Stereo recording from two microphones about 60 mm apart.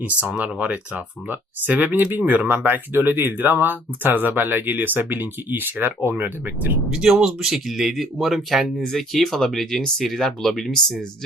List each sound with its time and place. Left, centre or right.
0.3 s speech: right
6.9 s speech: centre